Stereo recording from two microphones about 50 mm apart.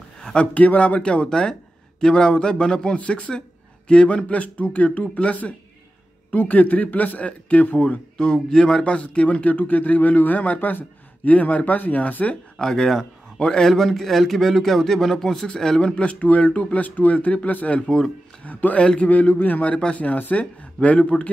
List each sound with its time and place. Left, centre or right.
0.2 s a sound: centre
0.6 s speech: left
8.2 s speech: centre; by 12.4 s left
12.5 s a man's voice: centre; by 17.8 s left
17.8 s a man's voice: centre
18.4 s speech: left